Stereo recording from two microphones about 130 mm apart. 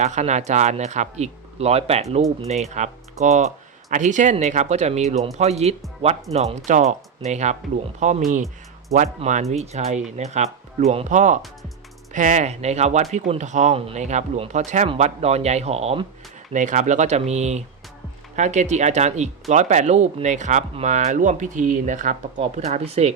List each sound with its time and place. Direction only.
0.0 s speech: 60° right (ahead or behind)
6.7 s speech: 70° right (ahead or behind)
13.7 s speech: 55° right (ahead or behind)
16.5 s speech: 75° right (ahead or behind); by 23.1 s 55° right (ahead or behind)